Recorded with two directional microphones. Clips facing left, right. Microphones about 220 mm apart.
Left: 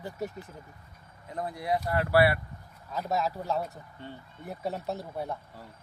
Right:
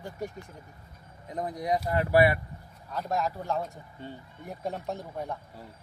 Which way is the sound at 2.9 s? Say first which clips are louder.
Even; 5° left (ahead or behind).